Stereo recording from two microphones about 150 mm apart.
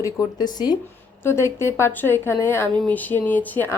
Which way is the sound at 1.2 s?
15° left (ahead or behind).